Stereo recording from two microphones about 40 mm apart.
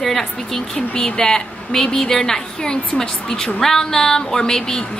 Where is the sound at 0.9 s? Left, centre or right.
Left.